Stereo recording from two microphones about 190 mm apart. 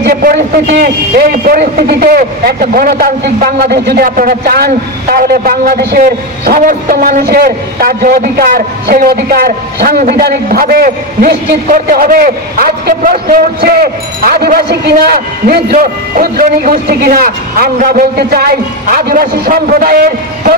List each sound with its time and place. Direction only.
0.0 s a man's voice: 50° right (ahead or behind)